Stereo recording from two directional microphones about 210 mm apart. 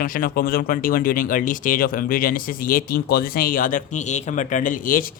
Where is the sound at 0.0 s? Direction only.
40° left (ahead or behind).